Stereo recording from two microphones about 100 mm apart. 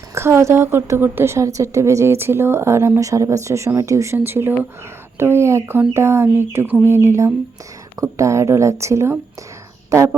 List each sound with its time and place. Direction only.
0.1 s a woman's voice: 25° right (ahead or behind)